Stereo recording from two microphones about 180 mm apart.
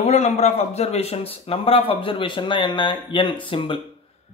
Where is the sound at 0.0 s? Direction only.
40° left (ahead or behind).